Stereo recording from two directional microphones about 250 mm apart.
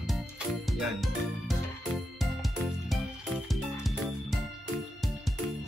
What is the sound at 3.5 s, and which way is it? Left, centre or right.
Music, centre.